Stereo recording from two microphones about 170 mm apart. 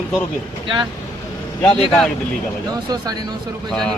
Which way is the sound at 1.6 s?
Centre (ahead or behind).